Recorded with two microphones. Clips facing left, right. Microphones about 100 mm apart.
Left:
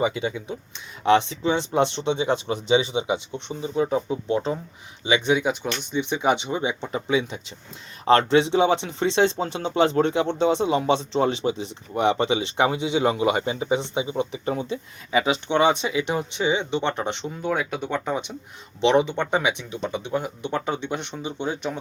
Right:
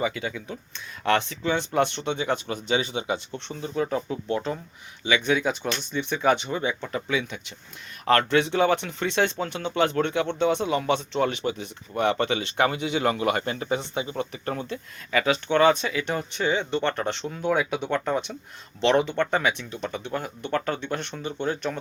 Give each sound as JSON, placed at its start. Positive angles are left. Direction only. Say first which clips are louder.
{"t": 0.0, "sound": "speech", "louder": "left 4 dB", "side_deg": 25}
{"t": 17.2, "sound": "speech", "louder": "right 3 dB", "side_deg": 5}
{"t": 17.9, "sound": "speech", "louder": "right 1 dB", "side_deg": 10}